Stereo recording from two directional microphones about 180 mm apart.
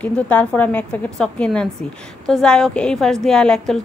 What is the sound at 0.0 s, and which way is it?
A woman's voice, 10° left (ahead or behind).